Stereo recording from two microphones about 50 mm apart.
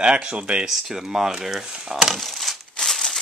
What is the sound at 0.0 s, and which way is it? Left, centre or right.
Speech, centre.